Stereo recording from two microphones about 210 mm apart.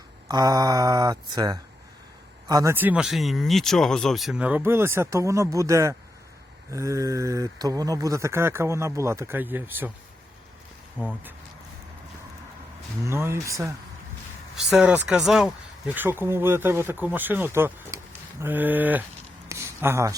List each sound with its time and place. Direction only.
0.3 s speech: 20° right (ahead or behind)
11.0 s speech: 10° right (ahead or behind)
13.1 s speech: 10° right (ahead or behind)
14.5 s speech: centre (ahead or behind)
19.5 s a sound: 10° right (ahead or behind)